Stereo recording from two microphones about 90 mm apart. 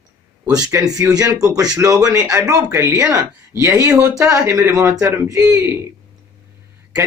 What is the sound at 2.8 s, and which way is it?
Speech, 30° right (ahead or behind).